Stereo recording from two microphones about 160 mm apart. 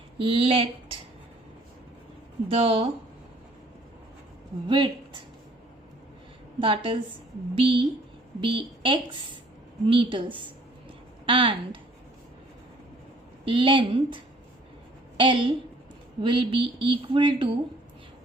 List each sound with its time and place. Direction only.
0.2 s speech: 35° right (ahead or behind)
2.5 s speech: 35° right (ahead or behind)
4.7 s speech: 30° right (ahead or behind)
6.6 s speech: 35° right (ahead or behind)
13.4 s speech: 35° right (ahead or behind)
15.2 s speech: 30° right (ahead or behind)